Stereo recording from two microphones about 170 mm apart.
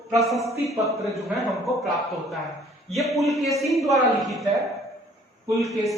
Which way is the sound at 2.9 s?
Centre (ahead or behind).